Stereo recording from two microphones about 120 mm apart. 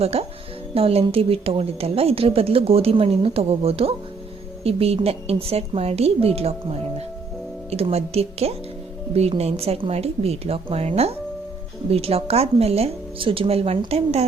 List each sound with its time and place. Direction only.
0.0 s speech: 60° right (ahead or behind)